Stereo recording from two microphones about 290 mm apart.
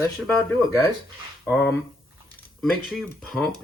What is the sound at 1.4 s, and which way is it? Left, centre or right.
Speech, centre.